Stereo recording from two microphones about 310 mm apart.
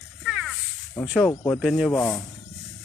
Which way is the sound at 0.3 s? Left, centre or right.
Centre.